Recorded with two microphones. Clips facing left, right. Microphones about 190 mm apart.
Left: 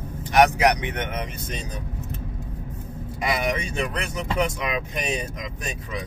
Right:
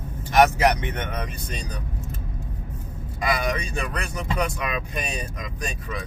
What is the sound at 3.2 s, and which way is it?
Speech, 25° left (ahead or behind).